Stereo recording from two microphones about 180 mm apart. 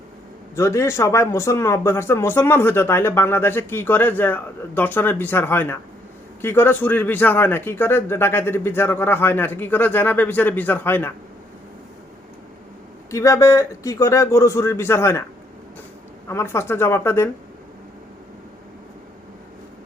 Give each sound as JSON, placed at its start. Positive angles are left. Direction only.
{"t": 0.5, "sound": "speech", "side_deg": 15}
{"t": 13.1, "sound": "speech", "side_deg": 15}
{"t": 16.3, "sound": "speech", "side_deg": 15}